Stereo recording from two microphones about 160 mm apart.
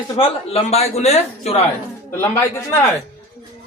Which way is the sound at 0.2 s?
40° left (ahead or behind).